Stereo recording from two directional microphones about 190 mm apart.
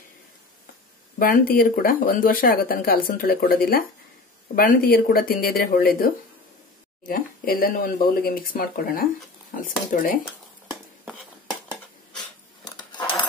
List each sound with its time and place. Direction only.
1.2 s speech: 50° left (ahead or behind)